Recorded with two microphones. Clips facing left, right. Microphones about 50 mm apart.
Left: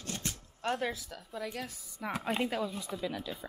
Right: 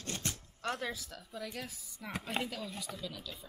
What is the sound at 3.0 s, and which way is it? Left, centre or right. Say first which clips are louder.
Speech: left 7 dB; left.